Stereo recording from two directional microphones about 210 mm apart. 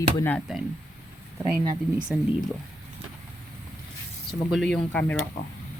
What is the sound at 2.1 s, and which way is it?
Speech, 5° right (ahead or behind).